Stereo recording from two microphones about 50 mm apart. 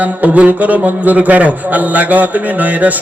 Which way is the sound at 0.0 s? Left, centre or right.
Right.